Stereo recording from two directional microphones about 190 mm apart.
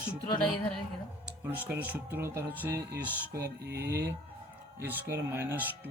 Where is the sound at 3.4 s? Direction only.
55° right (ahead or behind).